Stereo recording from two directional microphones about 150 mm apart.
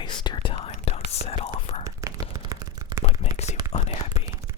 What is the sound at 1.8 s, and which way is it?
Whispering, 25° right (ahead or behind).